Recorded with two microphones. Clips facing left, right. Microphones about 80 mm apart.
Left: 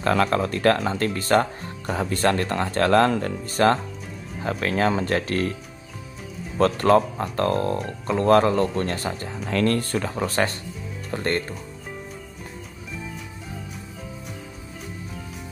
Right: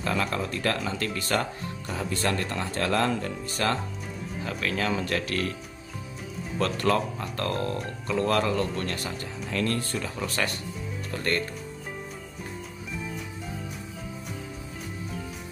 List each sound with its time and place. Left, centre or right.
0.0 s speech: left
6.6 s speech: left
9.4 s speech: left